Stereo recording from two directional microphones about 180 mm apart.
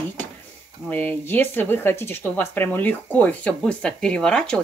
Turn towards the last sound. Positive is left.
turn(degrees=5)  # may be behind; listen again after turning